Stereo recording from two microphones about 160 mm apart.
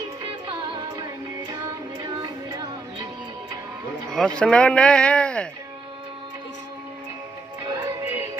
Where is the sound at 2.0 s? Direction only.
25° right (ahead or behind).